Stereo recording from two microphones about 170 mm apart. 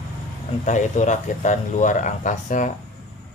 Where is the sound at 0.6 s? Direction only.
45° left (ahead or behind).